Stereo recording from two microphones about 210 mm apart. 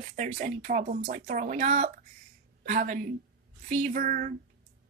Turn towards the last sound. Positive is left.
turn(degrees=-40)  # may be behind; listen again after turning